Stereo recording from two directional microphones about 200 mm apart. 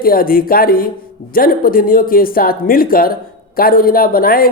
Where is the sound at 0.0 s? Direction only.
45° left (ahead or behind).